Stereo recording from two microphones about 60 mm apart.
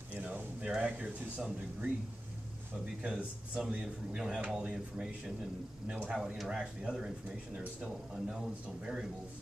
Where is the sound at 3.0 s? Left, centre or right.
Centre.